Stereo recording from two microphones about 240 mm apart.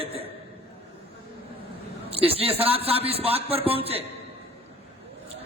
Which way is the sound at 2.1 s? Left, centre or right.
Right.